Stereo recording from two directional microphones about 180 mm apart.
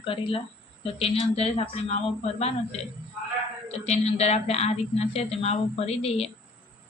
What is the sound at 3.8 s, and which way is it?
A woman's voice, 35° left (ahead or behind).